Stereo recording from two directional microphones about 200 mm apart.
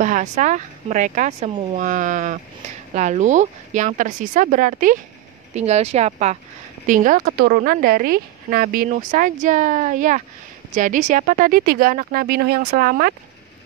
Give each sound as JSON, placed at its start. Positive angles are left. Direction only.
{"t": 0.0, "sound": "a woman's voice", "side_deg": -40}